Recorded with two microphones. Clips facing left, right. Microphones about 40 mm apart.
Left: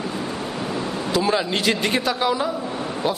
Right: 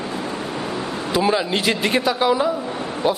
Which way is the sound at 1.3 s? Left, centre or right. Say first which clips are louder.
Right 1 dB; centre.